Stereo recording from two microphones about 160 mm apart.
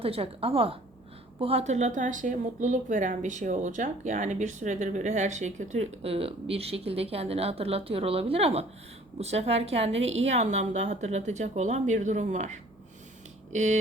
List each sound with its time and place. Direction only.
0.0 s a woman's voice: 35° right (ahead or behind)